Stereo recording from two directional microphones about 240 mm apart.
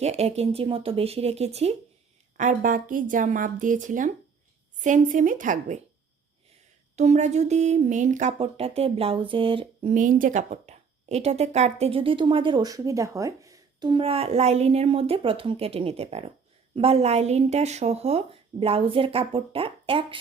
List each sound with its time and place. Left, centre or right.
0.0 s speech: right
6.9 s speech: right
9.9 s speech: right